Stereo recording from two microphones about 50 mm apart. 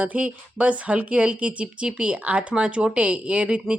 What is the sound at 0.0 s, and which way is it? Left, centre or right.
A woman's voice, right.